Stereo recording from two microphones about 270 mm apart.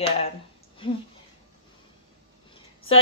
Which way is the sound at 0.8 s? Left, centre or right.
Centre.